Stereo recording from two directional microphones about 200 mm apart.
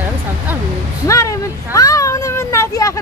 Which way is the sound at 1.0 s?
15° left (ahead or behind).